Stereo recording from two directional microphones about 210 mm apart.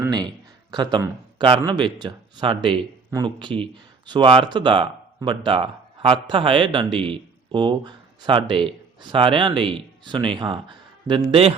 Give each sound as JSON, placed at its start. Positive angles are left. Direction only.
{"t": 0.0, "sound": "a man's voice", "side_deg": -20}